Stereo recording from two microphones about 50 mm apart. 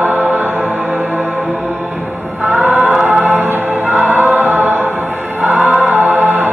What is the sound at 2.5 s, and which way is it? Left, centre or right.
Music, right.